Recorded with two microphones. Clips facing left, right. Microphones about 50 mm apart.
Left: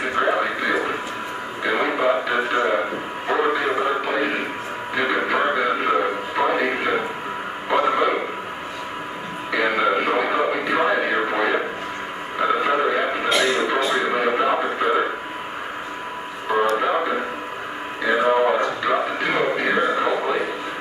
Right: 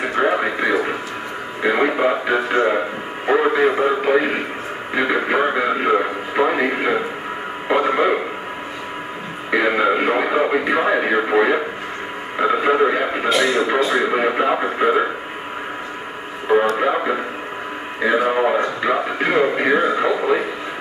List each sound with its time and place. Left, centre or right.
0.0 s radio: centre
2.5 s a sound: centre
4.9 s radio: centre
7.6 s a sound: centre
9.6 s radio: centre
16.7 s music: centre
18.1 s a sound: centre
18.6 s music: right
19.7 s radio: centre